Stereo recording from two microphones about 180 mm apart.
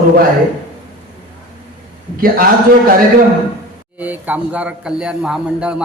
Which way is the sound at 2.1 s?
55° right (ahead or behind).